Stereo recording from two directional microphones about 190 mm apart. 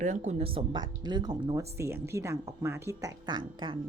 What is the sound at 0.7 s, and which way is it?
Speech, 20° right (ahead or behind).